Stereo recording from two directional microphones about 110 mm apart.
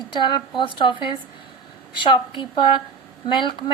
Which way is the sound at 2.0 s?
50° left (ahead or behind).